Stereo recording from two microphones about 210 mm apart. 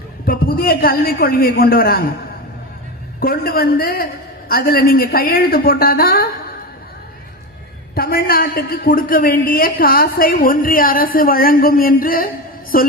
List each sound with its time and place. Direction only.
0.3 s a woman's voice: 45° left (ahead or behind)
3.2 s a woman's voice: 45° left (ahead or behind)
7.9 s a woman's voice: 45° left (ahead or behind)